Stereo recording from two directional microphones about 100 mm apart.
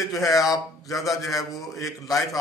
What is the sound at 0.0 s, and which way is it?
A man's voice, 35° left (ahead or behind).